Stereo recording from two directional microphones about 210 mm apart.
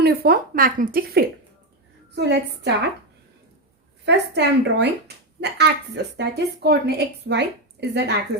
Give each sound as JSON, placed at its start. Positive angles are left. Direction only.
{"t": 0.0, "sound": "speech", "side_deg": -45}
{"t": 2.1, "sound": "a woman's voice", "side_deg": -55}
{"t": 4.0, "sound": "speech", "side_deg": -55}